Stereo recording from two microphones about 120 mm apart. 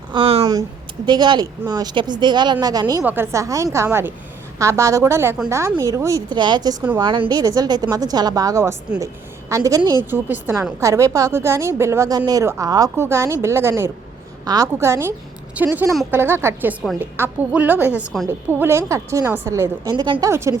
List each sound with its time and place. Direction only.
0.1 s a sound: 50° right (ahead or behind)
1.0 s speech: 40° right (ahead or behind)
3.0 s a woman's voice: 15° right (ahead or behind)
3.3 s a woman's voice: 25° right (ahead or behind)
10.0 s a woman's voice: 15° right (ahead or behind)
19.9 s speech: 35° right (ahead or behind)
20.2 s a woman's voice: 25° right (ahead or behind)